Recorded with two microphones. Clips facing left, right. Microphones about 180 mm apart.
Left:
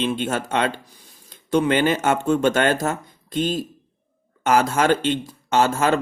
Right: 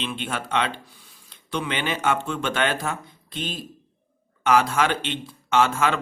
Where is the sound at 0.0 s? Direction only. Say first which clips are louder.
Left 7 dB; 45° left (ahead or behind).